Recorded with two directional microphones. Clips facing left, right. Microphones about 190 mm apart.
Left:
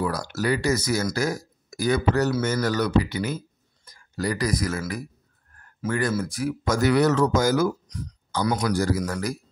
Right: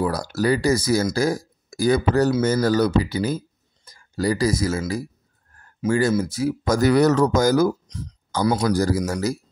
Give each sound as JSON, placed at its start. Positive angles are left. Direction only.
{"t": 0.0, "sound": "speech", "side_deg": -35}
{"t": 9.0, "sound": "speech", "side_deg": -25}